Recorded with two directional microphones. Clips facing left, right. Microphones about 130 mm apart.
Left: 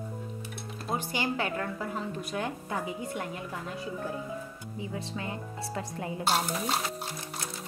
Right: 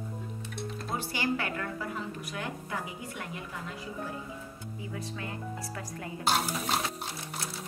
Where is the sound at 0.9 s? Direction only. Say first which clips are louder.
Left 1 dB; 20° left (ahead or behind).